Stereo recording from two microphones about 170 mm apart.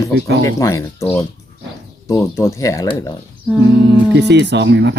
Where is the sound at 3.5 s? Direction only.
5° left (ahead or behind).